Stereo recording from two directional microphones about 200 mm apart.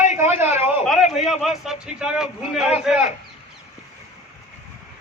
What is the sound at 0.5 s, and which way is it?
A man's voice, 10° right (ahead or behind).